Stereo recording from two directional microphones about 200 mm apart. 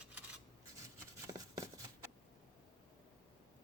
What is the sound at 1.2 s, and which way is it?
Shuffling cards, 15° right (ahead or behind).